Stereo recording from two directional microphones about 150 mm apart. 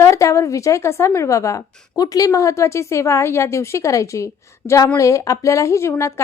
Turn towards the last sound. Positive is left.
turn(degrees=15)  # may be behind; listen again after turning